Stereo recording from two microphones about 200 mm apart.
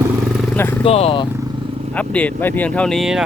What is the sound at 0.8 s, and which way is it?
Speech, 30° left (ahead or behind).